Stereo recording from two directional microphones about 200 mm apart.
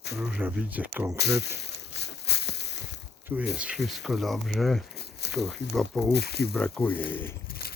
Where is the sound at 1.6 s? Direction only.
60° left (ahead or behind).